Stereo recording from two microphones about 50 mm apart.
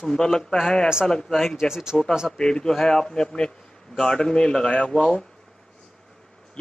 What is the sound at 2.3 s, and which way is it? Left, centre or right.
A man's voice, centre.